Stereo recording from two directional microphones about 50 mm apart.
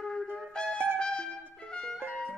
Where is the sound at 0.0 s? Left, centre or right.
Centre.